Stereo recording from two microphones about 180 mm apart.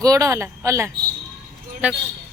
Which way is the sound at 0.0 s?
20° right (ahead or behind).